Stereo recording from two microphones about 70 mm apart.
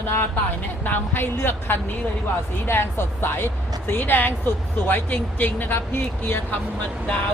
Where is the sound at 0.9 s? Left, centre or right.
Left.